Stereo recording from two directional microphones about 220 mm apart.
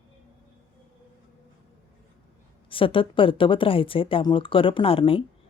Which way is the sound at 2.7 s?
25° left (ahead or behind).